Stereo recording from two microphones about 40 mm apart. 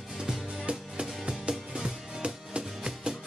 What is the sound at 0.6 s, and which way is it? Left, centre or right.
Music, right.